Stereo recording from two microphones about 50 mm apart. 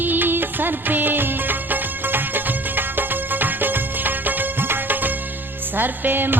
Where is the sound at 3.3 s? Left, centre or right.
Right.